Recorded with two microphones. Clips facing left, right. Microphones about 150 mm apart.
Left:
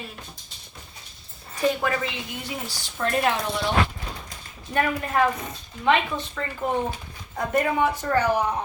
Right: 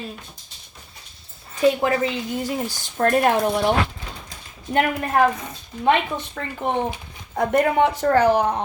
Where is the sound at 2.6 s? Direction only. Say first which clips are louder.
Right 5 dB; 50° right (ahead or behind).